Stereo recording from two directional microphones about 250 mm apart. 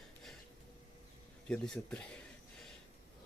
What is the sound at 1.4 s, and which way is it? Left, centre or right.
Speech, centre.